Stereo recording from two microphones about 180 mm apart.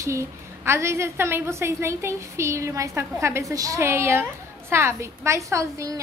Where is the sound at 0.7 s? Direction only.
15° right (ahead or behind).